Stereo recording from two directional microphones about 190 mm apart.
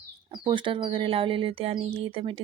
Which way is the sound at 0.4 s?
25° right (ahead or behind).